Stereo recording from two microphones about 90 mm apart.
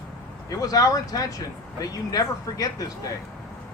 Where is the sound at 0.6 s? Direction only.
40° left (ahead or behind).